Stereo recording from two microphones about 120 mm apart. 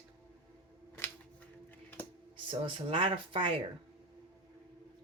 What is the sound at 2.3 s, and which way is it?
Speech, 45° right (ahead or behind).